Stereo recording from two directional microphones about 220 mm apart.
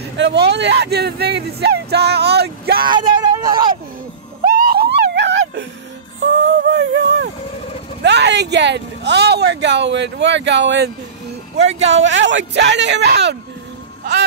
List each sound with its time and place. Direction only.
0.0 s speech: 50° right (ahead or behind)
2.9 s speech: 20° right (ahead or behind)
4.5 s a sound: 40° right (ahead or behind)
8.0 s speech: 50° right (ahead or behind)
11.9 s speech: 55° right (ahead or behind)